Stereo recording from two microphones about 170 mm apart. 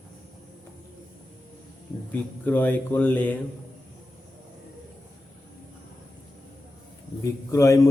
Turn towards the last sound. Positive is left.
turn(degrees=20)  # may be behind; listen again after turning